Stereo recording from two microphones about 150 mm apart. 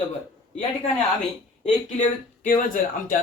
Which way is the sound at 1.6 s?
55° left (ahead or behind).